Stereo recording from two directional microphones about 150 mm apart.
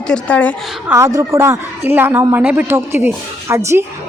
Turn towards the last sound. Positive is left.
turn(degrees=-20)  # may be behind; listen again after turning